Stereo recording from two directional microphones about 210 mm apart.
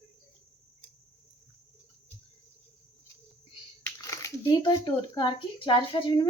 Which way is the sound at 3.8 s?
15° left (ahead or behind).